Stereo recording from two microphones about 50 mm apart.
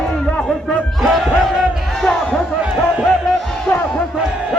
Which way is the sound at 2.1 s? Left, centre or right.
Centre.